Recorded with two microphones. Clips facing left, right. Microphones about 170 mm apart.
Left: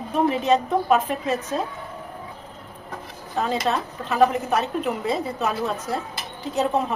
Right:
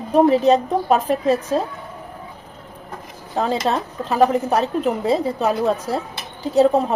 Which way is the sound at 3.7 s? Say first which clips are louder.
Right 4 dB; 35° right (ahead or behind).